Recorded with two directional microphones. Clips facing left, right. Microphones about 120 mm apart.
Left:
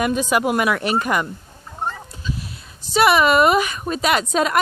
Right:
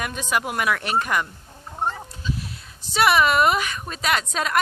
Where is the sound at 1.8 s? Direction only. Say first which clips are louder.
Right 1 dB; 15° right (ahead or behind).